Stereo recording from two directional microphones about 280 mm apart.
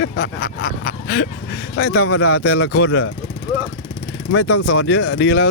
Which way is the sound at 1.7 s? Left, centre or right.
Left.